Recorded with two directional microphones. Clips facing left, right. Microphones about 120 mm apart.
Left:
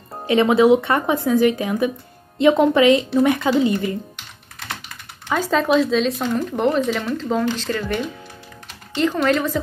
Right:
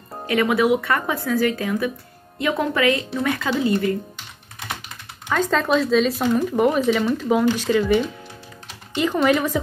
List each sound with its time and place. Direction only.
0.3 s speech: 25° left (ahead or behind)
5.3 s speech: 5° left (ahead or behind); by 9.6 s 10° right (ahead or behind)